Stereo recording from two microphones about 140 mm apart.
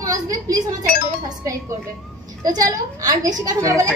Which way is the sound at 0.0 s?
25° right (ahead or behind).